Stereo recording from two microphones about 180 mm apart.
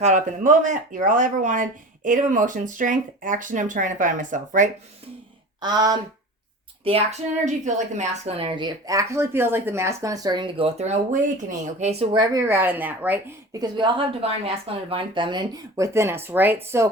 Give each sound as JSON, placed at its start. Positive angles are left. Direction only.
{"t": 0.0, "sound": "speech", "side_deg": -40}
{"t": 5.6, "sound": "a woman's voice", "side_deg": -20}
{"t": 6.8, "sound": "a woman's voice", "side_deg": -35}
{"t": 13.6, "sound": "a woman's voice", "side_deg": -25}